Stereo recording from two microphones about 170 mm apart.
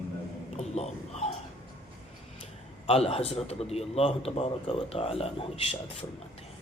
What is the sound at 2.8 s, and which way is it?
A man's voice, 35° left (ahead or behind).